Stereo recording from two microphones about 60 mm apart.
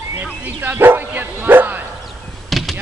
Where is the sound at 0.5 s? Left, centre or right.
Right.